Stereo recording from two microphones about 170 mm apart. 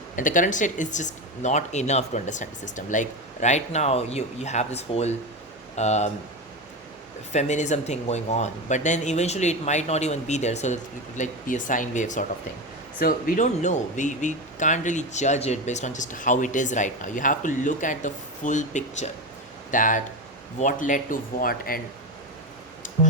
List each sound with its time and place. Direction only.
0.2 s speech: 50° left (ahead or behind)
7.3 s speech: 45° left (ahead or behind); by 21.8 s 60° left (ahead or behind)